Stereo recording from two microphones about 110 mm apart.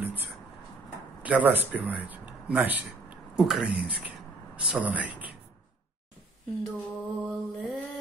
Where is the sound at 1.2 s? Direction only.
15° right (ahead or behind).